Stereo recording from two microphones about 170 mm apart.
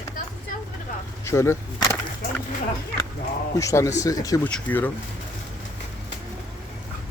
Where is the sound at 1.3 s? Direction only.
15° left (ahead or behind).